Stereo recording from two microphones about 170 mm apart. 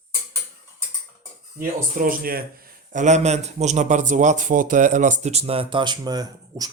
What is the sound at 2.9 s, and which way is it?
A man's voice, 45° right (ahead or behind).